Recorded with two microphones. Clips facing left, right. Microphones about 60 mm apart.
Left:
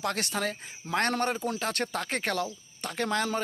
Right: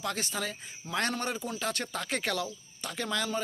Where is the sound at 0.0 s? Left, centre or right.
Left.